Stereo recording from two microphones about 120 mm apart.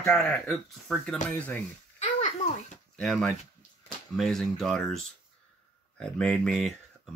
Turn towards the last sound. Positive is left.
turn(degrees=5)  # may be behind; listen again after turning